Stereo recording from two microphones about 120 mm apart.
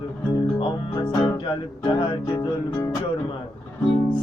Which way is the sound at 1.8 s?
40° left (ahead or behind).